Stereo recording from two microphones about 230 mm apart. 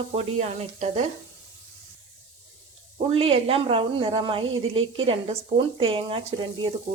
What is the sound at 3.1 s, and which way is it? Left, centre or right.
Speech, right.